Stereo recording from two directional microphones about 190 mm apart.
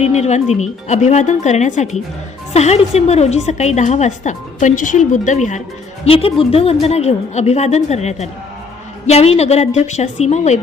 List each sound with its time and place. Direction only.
0.0 s a woman's voice: 35° left (ahead or behind)
6.1 s a woman's voice: 30° left (ahead or behind)